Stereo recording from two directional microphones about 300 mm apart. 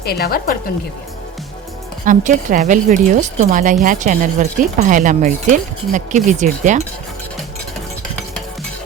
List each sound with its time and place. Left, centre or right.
0.0 s a woman's voice: left
2.0 s speech: right